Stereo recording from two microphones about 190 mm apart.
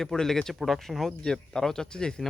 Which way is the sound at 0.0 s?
Centre (ahead or behind).